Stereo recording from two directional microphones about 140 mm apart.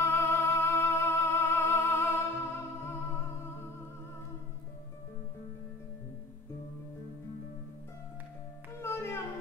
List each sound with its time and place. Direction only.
0.0 s music: 15° left (ahead or behind)
8.8 s music: 15° left (ahead or behind)